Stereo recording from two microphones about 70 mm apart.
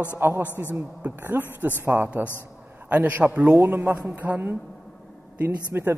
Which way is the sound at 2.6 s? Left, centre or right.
Right.